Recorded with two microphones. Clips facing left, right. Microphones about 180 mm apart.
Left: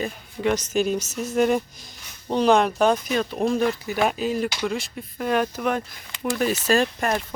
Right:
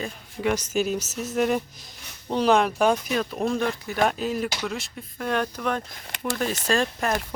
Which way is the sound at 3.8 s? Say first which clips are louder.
Left 1 dB; 10° left (ahead or behind).